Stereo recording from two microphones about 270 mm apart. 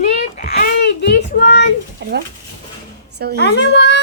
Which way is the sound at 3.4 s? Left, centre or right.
Left.